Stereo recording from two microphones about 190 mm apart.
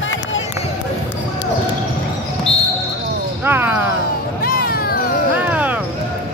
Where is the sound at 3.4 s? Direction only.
10° right (ahead or behind).